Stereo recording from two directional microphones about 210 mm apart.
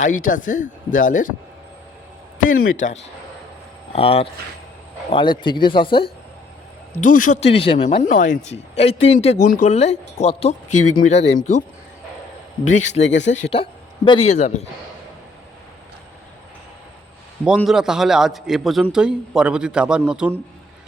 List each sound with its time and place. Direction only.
0.0 s a man's voice: 40° left (ahead or behind)
2.5 s a man's voice: 40° left (ahead or behind)
3.9 s speech: 25° left (ahead or behind)
7.0 s a man's voice: 40° left (ahead or behind)
13.0 s speech: 60° left (ahead or behind)
13.3 s speech: 25° left (ahead or behind)
17.4 s a man's voice: centre (ahead or behind)